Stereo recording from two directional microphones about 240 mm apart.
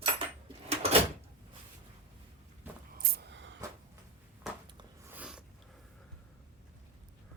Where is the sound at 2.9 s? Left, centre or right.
Right.